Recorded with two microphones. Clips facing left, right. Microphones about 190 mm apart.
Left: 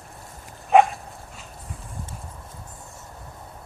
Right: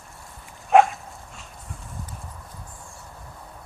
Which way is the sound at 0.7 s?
Centre (ahead or behind).